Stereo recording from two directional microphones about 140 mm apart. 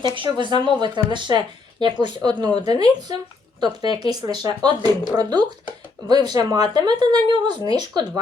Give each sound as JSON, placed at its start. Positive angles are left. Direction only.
{"t": 0.0, "sound": "speech", "side_deg": -35}